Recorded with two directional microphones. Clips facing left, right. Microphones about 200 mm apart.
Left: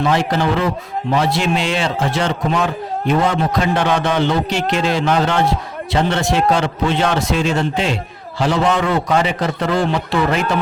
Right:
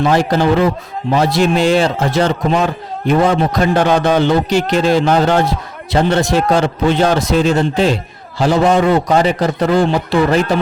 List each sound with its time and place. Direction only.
0.0 s a man's voice: 40° right (ahead or behind)